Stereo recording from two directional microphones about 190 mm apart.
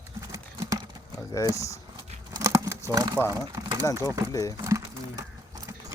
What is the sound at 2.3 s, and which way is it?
Crumpling, 15° right (ahead or behind).